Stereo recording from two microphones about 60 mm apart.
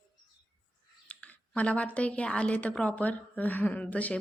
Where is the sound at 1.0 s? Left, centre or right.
Left.